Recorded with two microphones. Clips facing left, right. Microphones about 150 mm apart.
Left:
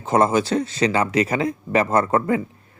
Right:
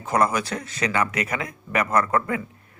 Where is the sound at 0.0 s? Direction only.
25° left (ahead or behind).